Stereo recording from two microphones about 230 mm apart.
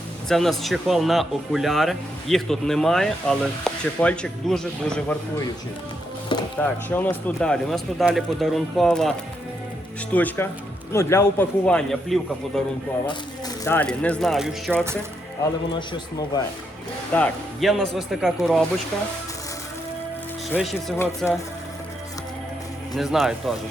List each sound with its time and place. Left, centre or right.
0.3 s speech: centre
6.6 s speech: centre
13.7 s speech: centre
15.7 s a man's voice: centre
17.1 s speech: centre
20.5 s speech: centre
23.0 s speech: centre